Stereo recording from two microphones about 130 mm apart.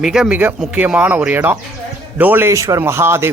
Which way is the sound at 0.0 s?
Centre (ahead or behind).